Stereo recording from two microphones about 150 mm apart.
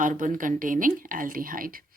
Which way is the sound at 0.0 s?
60° right (ahead or behind).